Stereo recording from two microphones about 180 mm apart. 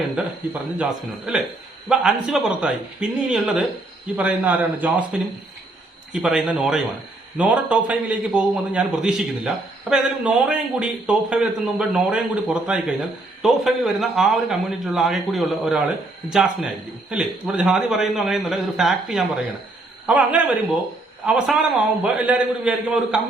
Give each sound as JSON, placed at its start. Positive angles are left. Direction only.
{"t": 0.2, "sound": "a man's voice", "side_deg": -5}
{"t": 6.2, "sound": "a man's voice", "side_deg": -5}